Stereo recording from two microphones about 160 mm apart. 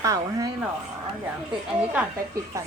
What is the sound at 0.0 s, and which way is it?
Speech, 20° right (ahead or behind).